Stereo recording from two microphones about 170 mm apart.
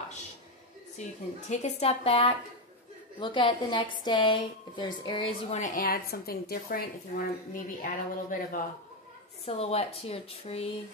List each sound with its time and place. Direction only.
1.5 s a woman's voice: 40° left (ahead or behind)
5.6 s a woman's voice: 50° left (ahead or behind)
9.5 s speech: 35° left (ahead or behind)